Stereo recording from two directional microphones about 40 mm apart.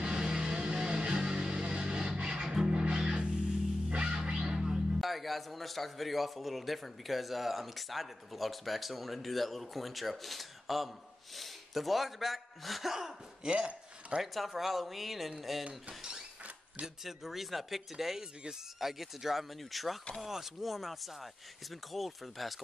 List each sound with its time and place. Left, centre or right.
0.0 s music: right
5.0 s a man's voice: centre
13.5 s speech: right
14.2 s a man's voice: centre
16.8 s a man's voice: centre